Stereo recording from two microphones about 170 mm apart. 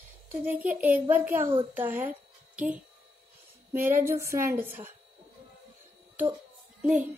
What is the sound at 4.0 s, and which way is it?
Speech, 15° right (ahead or behind).